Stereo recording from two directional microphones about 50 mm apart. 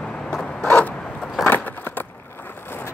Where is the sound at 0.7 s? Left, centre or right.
Left.